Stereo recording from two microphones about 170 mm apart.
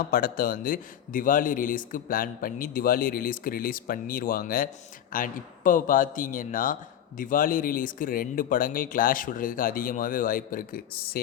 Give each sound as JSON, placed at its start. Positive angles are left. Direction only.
{"t": 0.0, "sound": "speech", "side_deg": 60}